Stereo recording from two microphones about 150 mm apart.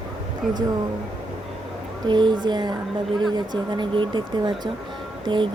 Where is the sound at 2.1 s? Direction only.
30° right (ahead or behind).